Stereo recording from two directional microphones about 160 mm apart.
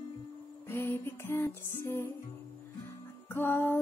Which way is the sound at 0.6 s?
15° left (ahead or behind).